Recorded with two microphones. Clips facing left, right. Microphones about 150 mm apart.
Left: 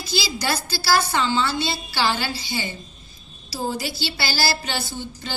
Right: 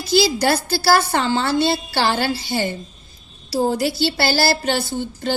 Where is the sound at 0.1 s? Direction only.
55° right (ahead or behind).